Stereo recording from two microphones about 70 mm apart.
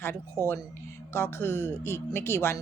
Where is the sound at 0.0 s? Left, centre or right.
Left.